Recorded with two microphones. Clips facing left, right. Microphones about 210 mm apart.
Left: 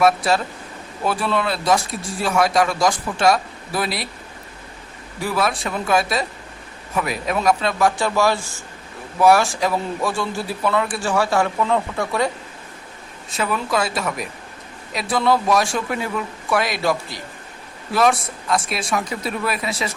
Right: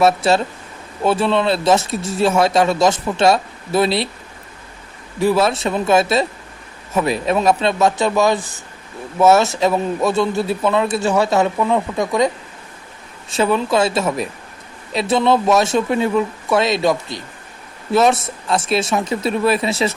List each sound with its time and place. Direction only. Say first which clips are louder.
0.0 s a man's voice: right 3 dB; 25° right (ahead or behind)
5.2 s a man's voice: right 7 dB; 25° right (ahead or behind)
13.3 s a man's voice: right 6 dB; 25° right (ahead or behind)